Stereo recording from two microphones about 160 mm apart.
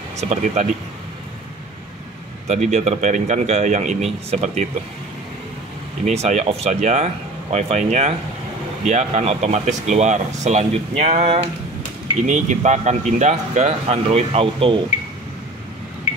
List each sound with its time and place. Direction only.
0.2 s speech: 45° right (ahead or behind)
2.4 s speech: 45° right (ahead or behind)
6.0 s speech: 45° right (ahead or behind)